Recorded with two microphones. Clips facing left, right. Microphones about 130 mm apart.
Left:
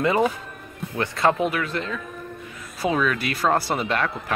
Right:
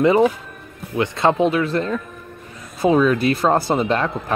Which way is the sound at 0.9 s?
20° right (ahead or behind).